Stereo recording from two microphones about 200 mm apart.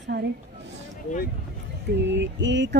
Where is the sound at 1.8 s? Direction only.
60° right (ahead or behind).